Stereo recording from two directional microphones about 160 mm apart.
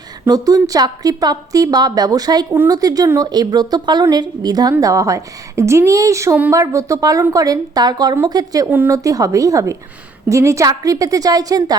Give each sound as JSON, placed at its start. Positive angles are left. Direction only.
{"t": 0.3, "sound": "a woman's voice", "side_deg": -20}